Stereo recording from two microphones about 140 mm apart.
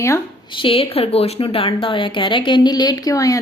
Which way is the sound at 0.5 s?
40° left (ahead or behind).